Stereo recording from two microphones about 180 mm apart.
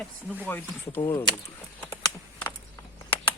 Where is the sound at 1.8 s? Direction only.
15° left (ahead or behind).